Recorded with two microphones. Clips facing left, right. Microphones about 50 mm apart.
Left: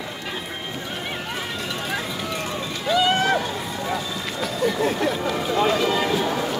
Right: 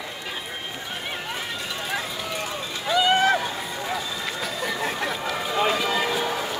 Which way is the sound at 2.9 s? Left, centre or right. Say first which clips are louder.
Even; centre.